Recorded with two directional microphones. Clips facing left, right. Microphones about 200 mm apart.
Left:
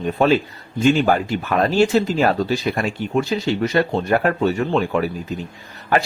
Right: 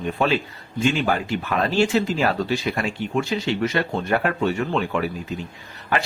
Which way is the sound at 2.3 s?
40° left (ahead or behind).